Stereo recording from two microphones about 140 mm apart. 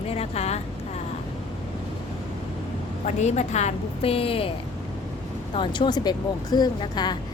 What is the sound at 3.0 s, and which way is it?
A woman's voice, 55° left (ahead or behind).